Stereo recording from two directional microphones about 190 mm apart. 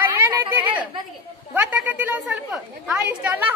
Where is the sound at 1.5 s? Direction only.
10° right (ahead or behind).